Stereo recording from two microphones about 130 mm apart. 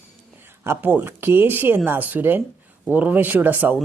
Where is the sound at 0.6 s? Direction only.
20° right (ahead or behind).